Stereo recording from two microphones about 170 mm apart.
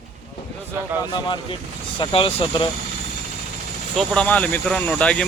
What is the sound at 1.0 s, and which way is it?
Speech, 25° left (ahead or behind).